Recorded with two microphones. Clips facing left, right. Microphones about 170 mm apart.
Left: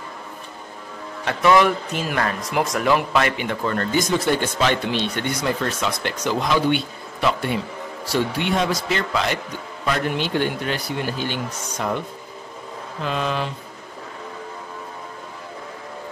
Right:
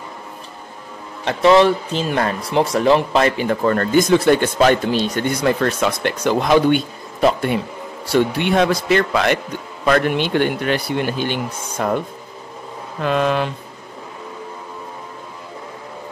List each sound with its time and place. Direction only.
1.2 s a man's voice: 30° right (ahead or behind)
3.6 s speech: 50° right (ahead or behind)
8.1 s speech: 60° right (ahead or behind)
13.0 s speech: 60° right (ahead or behind)